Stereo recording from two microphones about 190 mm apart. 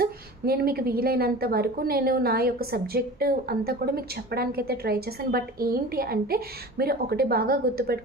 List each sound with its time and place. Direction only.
0.0 s a woman's voice: 55° right (ahead or behind)